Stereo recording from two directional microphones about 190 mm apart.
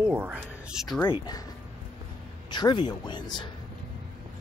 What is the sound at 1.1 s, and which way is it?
Speech, 20° left (ahead or behind).